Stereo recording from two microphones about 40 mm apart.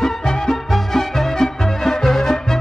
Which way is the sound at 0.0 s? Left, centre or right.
Centre.